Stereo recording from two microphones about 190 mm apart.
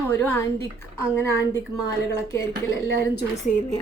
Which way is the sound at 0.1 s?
10° left (ahead or behind).